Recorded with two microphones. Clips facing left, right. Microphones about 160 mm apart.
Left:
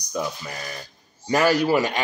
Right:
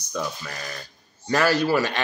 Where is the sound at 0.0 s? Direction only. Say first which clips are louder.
Left 2 dB; 15° left (ahead or behind).